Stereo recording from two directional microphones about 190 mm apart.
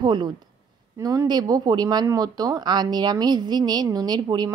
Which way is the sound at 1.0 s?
20° right (ahead or behind).